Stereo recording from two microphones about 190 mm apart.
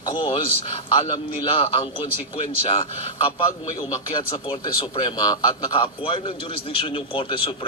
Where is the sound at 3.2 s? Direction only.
30° left (ahead or behind).